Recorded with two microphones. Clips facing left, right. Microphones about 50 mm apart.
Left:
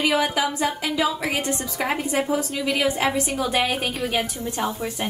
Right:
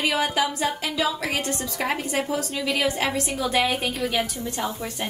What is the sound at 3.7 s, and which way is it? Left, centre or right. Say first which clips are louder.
A woman's voice: left 1 dB; left.